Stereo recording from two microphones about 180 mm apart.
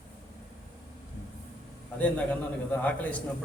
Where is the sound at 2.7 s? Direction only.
10° left (ahead or behind).